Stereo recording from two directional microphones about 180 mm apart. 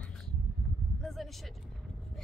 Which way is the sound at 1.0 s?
Centre (ahead or behind).